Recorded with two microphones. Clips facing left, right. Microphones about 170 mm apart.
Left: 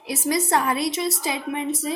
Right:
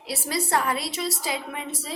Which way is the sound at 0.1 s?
20° left (ahead or behind).